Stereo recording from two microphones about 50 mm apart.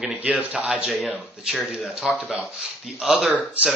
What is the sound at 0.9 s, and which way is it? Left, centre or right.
Speech, centre.